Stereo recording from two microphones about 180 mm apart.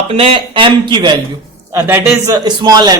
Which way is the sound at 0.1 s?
30° right (ahead or behind).